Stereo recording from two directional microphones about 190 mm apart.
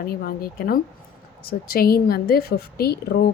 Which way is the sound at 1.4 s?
50° left (ahead or behind).